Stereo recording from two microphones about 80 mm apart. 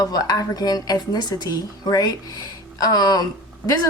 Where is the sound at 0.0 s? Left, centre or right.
Left.